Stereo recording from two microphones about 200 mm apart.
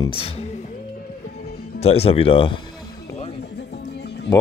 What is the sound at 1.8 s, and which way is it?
Speech, 30° left (ahead or behind).